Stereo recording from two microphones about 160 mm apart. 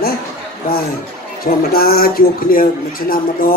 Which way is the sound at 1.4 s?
70° left (ahead or behind).